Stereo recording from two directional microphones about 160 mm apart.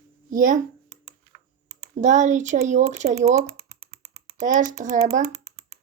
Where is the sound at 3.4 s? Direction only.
80° right.